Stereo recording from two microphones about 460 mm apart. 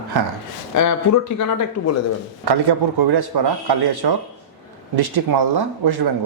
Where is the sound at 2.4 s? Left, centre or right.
Right.